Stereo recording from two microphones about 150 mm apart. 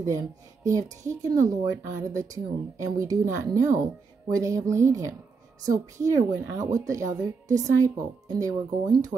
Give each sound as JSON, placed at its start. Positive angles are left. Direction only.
{"t": 0.7, "sound": "speech", "side_deg": -20}
{"t": 7.4, "sound": "a woman's voice", "side_deg": -55}
{"t": 7.8, "sound": "speech", "side_deg": -20}